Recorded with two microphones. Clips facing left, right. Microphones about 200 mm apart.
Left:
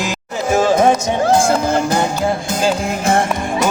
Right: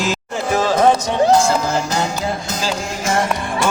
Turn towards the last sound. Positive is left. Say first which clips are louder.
# left 4 dB
turn(degrees=55)  # may be behind; listen again after turning